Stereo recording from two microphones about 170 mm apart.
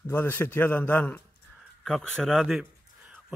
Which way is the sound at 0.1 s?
10° left (ahead or behind).